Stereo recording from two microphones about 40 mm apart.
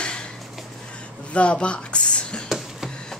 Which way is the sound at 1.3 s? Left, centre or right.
Left.